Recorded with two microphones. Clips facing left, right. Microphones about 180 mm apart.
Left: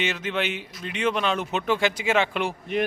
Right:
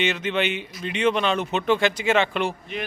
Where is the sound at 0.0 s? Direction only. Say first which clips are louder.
Right 3 dB; 5° left (ahead or behind).